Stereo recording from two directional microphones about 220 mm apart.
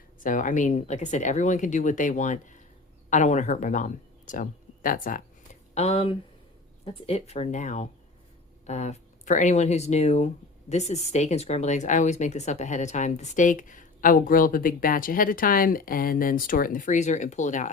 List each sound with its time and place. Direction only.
0.2 s speech: 35° left (ahead or behind)
5.7 s speech: 25° left (ahead or behind)